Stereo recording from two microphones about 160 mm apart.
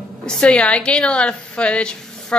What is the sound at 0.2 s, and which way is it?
A woman's voice, 5° left (ahead or behind).